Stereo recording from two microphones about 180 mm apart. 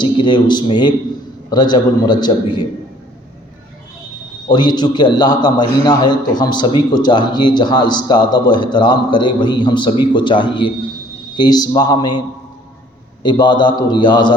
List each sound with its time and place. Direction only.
0.0 s a man's voice: 25° left (ahead or behind)
4.4 s a man's voice: 25° left (ahead or behind)
13.2 s a man's voice: 25° left (ahead or behind)